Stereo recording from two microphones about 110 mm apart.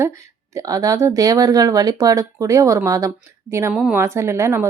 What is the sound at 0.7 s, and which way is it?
A woman's voice, 30° right (ahead or behind).